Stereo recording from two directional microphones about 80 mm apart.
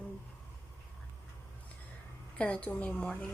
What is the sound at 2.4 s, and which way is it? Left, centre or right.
Speech, centre.